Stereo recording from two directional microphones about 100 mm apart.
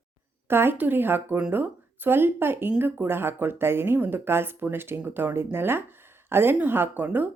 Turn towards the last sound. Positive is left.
turn(degrees=-15)  # may be behind; listen again after turning